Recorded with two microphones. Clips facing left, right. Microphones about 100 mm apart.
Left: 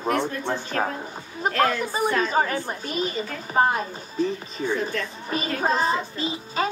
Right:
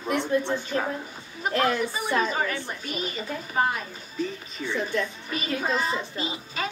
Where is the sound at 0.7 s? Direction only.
55° left (ahead or behind).